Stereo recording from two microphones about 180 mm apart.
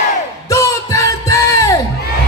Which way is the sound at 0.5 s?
15° left (ahead or behind).